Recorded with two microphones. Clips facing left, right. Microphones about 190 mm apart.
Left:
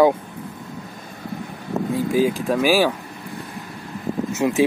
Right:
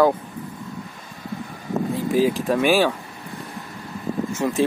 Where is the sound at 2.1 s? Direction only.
Centre (ahead or behind).